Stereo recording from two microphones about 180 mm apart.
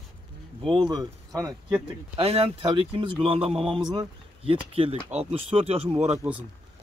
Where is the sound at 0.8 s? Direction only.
20° right (ahead or behind).